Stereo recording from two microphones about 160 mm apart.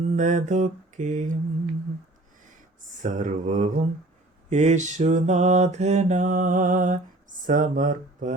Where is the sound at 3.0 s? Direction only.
50° right (ahead or behind).